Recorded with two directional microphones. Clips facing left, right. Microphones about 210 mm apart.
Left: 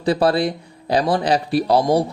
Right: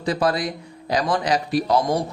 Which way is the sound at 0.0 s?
30° left (ahead or behind).